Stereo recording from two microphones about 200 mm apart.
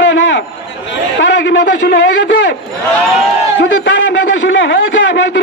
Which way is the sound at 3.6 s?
65° left (ahead or behind).